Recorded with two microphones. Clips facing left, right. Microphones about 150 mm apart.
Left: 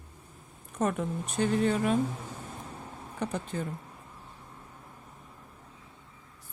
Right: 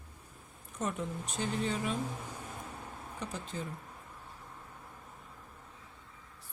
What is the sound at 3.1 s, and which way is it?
Speech, 60° left (ahead or behind).